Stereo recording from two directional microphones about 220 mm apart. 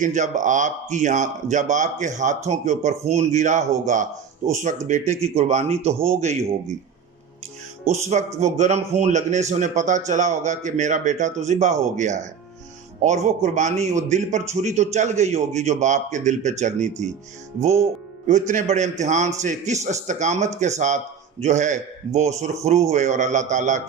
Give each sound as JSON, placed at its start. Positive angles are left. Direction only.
{"t": 0.0, "sound": "a man's voice", "side_deg": -35}
{"t": 7.9, "sound": "speech", "side_deg": -30}